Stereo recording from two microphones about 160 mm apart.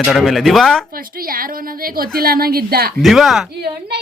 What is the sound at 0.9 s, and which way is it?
A woman's voice, 65° right (ahead or behind).